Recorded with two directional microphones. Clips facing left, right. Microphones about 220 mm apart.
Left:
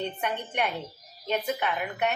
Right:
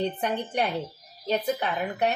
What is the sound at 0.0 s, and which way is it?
A woman's voice, 35° right (ahead or behind).